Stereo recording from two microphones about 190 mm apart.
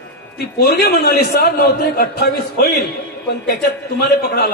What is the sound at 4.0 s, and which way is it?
Speech, 55° left (ahead or behind).